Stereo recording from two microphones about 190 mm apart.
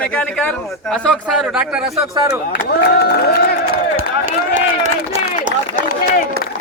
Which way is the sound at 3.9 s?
45° right (ahead or behind).